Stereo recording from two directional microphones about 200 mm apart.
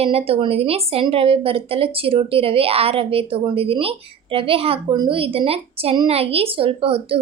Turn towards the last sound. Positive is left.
turn(degrees=-30)  # may be behind; listen again after turning